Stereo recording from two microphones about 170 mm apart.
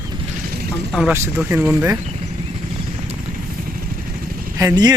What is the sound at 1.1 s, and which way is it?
Speech, 15° right (ahead or behind).